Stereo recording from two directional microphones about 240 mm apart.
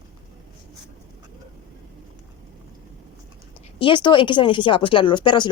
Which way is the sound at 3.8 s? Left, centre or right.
Centre.